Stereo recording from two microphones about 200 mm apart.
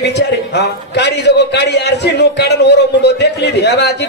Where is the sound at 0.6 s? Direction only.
60° left (ahead or behind).